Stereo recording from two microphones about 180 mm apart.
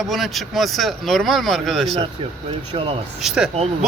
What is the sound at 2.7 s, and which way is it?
Speech, 35° right (ahead or behind).